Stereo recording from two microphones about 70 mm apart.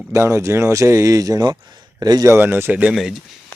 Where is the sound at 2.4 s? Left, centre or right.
Right.